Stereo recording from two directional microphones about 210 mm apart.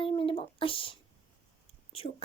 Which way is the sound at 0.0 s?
25° left (ahead or behind).